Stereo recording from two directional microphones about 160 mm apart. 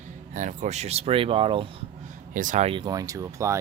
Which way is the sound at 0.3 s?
50° right (ahead or behind).